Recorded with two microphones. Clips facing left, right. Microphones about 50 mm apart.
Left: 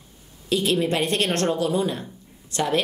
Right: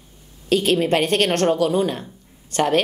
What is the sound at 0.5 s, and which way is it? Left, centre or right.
A woman's voice, right.